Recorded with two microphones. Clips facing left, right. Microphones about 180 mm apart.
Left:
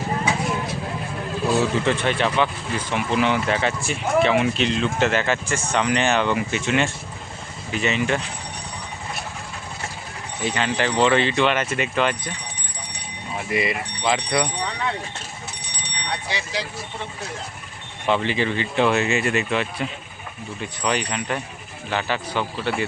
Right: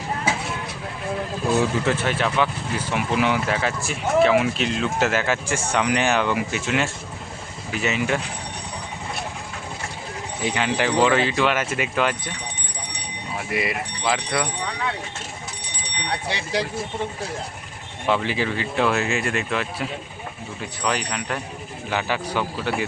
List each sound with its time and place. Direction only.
1.8 s speech: 5° right (ahead or behind)
10.4 s speech: 10° right (ahead or behind)
13.5 s speech: 5° right (ahead or behind)
16.3 s speech: 60° right (ahead or behind)
18.0 s speech: 5° right (ahead or behind)
21.8 s speech: 10° right (ahead or behind)